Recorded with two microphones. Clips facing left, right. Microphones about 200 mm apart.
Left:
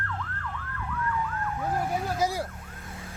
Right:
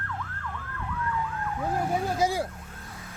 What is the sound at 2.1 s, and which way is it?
Vehicle, 30° right (ahead or behind).